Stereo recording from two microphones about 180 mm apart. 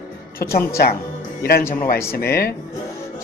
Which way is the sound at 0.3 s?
55° left (ahead or behind).